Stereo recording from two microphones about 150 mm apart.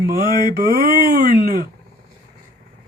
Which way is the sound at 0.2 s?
30° left (ahead or behind).